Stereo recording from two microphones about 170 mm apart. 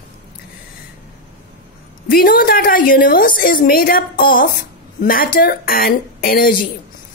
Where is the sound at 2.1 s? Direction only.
55° left (ahead or behind).